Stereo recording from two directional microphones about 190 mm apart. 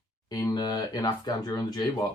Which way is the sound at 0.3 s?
20° left (ahead or behind).